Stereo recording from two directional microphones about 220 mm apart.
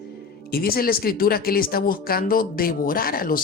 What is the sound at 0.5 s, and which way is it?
Speech, 40° left (ahead or behind).